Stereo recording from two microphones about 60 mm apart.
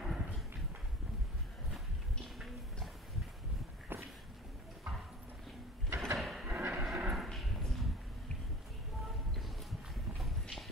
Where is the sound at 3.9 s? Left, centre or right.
Right.